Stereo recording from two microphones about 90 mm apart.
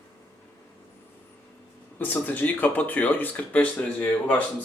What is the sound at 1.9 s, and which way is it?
Speech, 20° left (ahead or behind).